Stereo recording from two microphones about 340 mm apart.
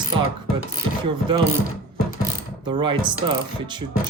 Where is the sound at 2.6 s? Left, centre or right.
Centre.